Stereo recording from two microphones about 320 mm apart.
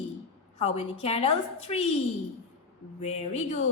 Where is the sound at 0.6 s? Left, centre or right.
Centre.